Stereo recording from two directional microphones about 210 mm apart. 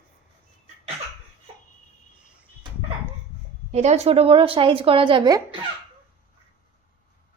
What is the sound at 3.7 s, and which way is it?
Speech, 30° right (ahead or behind).